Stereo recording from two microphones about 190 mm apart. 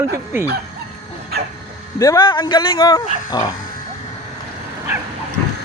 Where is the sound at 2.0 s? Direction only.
20° left (ahead or behind).